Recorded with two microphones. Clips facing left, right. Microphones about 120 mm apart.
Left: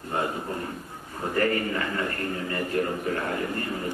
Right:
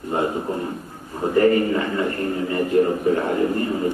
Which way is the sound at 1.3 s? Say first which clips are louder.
Right 9 dB; 20° right (ahead or behind).